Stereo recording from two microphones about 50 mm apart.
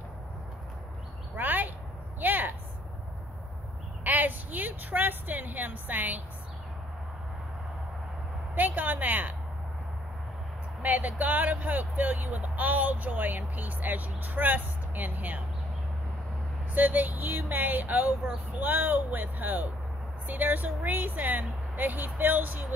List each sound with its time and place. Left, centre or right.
1.3 s a sound: right
4.0 s a woman's voice: right
8.5 s speech: right
10.8 s speech: right
16.7 s speech: right